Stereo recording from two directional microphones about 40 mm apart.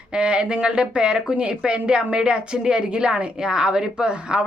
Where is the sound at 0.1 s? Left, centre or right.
Right.